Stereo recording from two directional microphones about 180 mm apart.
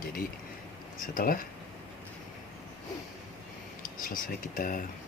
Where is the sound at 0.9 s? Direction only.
50° left (ahead or behind).